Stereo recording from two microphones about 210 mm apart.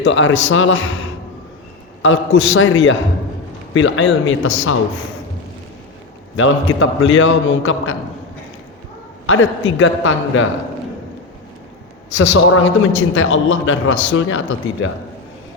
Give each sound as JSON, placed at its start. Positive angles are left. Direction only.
{"t": 0.0, "sound": "a man's voice", "side_deg": 65}
{"t": 2.0, "sound": "a man's voice", "side_deg": 65}
{"t": 6.3, "sound": "a man's voice", "side_deg": 70}
{"t": 9.2, "sound": "a man's voice", "side_deg": 70}
{"t": 12.1, "sound": "a man's voice", "side_deg": 60}
{"t": 13.1, "sound": "a man's voice", "side_deg": 75}